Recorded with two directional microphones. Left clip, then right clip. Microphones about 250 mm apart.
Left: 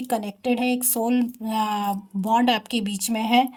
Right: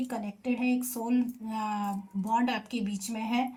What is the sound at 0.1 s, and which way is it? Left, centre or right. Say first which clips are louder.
A woman's voice: left 10 dB; left.